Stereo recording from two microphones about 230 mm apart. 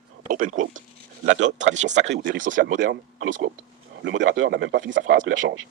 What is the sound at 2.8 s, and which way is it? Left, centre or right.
Speech, right.